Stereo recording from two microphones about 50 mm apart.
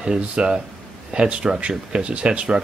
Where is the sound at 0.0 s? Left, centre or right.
Right.